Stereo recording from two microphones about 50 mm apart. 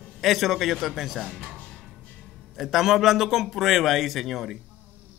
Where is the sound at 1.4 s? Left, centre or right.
Centre.